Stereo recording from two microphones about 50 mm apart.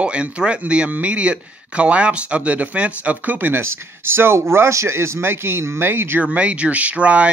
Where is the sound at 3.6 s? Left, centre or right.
Right.